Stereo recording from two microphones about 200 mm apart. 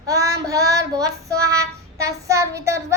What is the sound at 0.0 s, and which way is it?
Child singing, 15° right (ahead or behind).